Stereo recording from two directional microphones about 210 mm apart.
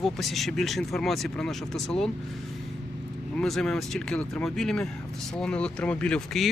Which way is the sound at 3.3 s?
Centre (ahead or behind).